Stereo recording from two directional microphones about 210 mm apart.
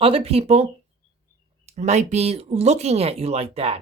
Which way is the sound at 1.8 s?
30° right (ahead or behind).